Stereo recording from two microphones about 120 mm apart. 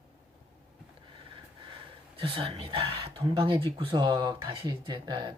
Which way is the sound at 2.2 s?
50° right (ahead or behind).